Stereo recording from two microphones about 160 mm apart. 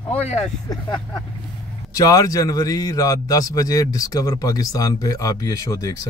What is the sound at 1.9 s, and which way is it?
A man's voice, 20° left (ahead or behind).